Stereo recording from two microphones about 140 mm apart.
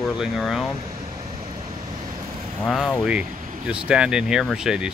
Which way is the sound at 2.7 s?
5° left (ahead or behind).